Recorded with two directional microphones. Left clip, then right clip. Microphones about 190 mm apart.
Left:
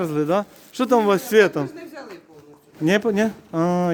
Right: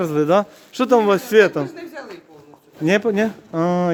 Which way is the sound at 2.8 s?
10° left (ahead or behind).